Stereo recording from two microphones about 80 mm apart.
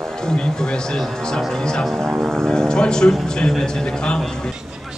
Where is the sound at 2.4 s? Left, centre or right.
Centre.